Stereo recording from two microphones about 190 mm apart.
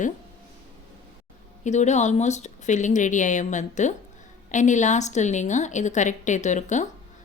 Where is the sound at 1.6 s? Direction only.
40° left (ahead or behind).